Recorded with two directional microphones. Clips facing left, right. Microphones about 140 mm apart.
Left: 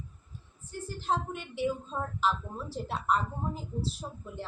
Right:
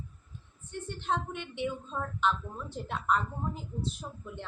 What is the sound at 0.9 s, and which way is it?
Speech, 35° left (ahead or behind).